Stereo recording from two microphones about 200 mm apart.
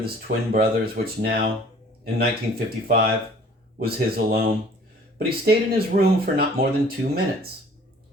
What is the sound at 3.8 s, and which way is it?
Speech, 50° right (ahead or behind).